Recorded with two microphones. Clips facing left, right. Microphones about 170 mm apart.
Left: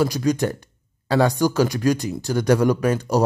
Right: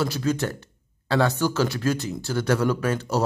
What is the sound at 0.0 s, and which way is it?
A man's voice, 15° left (ahead or behind).